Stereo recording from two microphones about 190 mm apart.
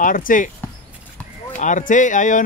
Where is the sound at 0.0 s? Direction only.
45° left (ahead or behind).